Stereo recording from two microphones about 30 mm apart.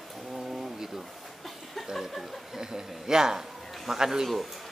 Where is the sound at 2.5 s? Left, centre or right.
Centre.